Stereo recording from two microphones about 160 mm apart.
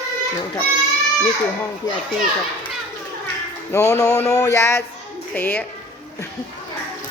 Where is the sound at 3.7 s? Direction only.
20° left (ahead or behind).